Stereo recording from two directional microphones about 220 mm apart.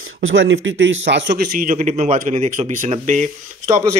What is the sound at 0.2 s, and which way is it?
Speech, 60° right (ahead or behind).